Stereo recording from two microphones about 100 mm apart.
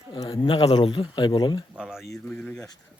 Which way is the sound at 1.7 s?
5° right (ahead or behind).